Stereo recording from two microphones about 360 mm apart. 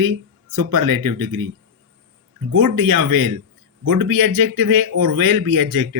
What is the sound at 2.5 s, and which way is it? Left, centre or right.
Speech, right.